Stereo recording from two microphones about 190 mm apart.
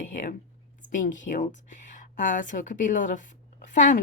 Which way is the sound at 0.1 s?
45° left (ahead or behind).